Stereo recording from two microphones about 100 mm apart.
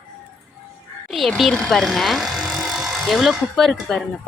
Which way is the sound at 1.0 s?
Centre (ahead or behind).